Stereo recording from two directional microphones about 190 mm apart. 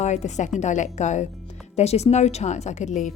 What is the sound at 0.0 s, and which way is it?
Speech, 40° left (ahead or behind).